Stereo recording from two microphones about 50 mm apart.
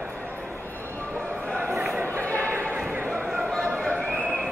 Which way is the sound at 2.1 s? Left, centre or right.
Left.